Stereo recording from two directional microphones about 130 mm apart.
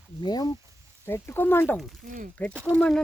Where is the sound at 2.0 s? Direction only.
85° right.